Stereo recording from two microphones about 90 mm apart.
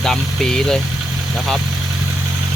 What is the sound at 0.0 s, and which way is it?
Speech, 5° left (ahead or behind).